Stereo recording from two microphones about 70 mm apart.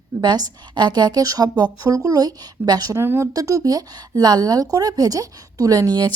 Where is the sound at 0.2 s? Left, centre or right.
Right.